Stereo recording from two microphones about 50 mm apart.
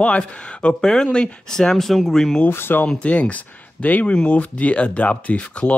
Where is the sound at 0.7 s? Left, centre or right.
Centre.